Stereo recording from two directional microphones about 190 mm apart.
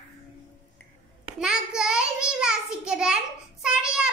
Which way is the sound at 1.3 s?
5° right (ahead or behind).